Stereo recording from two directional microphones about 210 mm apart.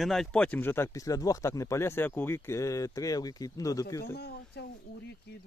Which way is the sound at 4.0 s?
50° left (ahead or behind).